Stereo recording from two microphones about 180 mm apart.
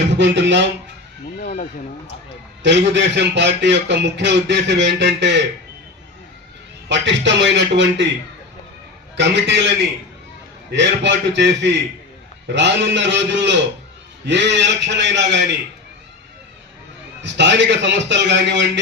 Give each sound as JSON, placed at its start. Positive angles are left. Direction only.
{"t": 0.2, "sound": "speech", "side_deg": -75}
{"t": 1.4, "sound": "speech", "side_deg": 50}
{"t": 2.6, "sound": "speech", "side_deg": -75}
{"t": 6.8, "sound": "a man's voice", "side_deg": -80}
{"t": 9.1, "sound": "speech", "side_deg": -75}
{"t": 10.7, "sound": "a man's voice", "side_deg": -80}
{"t": 17.3, "sound": "speech", "side_deg": -75}